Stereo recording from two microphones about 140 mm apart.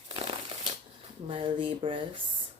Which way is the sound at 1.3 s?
35° right (ahead or behind).